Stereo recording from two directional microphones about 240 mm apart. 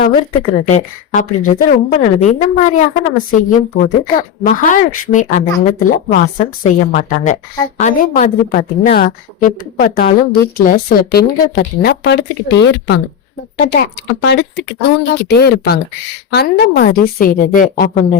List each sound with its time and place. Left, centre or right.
0.7 s a woman's voice: left
4.4 s a woman's voice: left